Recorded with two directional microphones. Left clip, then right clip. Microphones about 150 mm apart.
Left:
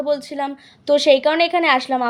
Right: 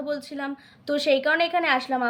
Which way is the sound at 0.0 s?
40° left (ahead or behind).